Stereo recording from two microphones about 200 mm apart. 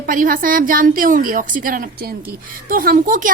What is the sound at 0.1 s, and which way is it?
A woman's voice, 45° right (ahead or behind).